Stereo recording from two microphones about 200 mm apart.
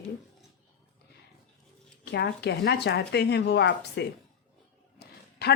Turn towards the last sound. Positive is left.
turn(degrees=55)  # may be behind; listen again after turning